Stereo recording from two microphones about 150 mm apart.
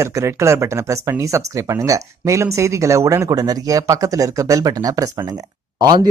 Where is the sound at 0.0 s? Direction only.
20° right (ahead or behind).